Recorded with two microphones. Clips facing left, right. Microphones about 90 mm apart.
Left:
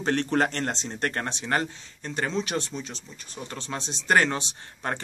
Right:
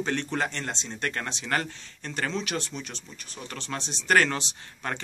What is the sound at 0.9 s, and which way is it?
Speech, 35° left (ahead or behind).